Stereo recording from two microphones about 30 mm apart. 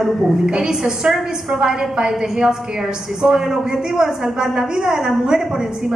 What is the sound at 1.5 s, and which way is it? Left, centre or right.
Speech, right.